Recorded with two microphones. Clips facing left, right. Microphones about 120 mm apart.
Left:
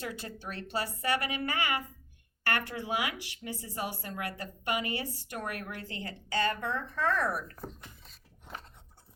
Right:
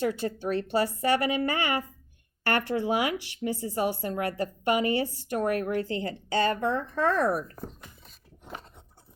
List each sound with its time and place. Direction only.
0.0 s speech: 30° right (ahead or behind)